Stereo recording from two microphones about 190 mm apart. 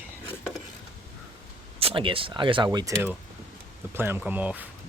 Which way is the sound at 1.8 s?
30° right (ahead or behind).